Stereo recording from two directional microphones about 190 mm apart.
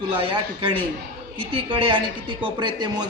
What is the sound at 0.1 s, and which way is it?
A man's voice, 30° right (ahead or behind).